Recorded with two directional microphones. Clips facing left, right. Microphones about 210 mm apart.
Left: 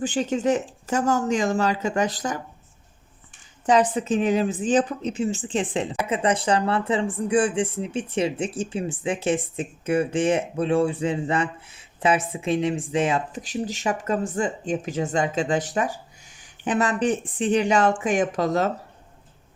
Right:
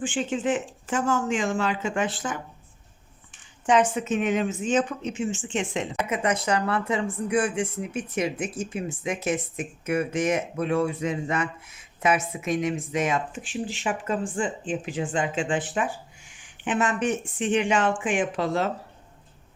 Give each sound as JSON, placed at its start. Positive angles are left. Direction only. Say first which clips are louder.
{"t": 0.0, "sound": "speech", "louder": "left 3 dB", "side_deg": 40}
{"t": 3.7, "sound": "speech", "louder": "left 2 dB", "side_deg": 35}